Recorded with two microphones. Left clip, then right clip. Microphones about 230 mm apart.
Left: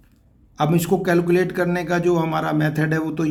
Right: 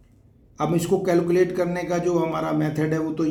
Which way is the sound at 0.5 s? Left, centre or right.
Left.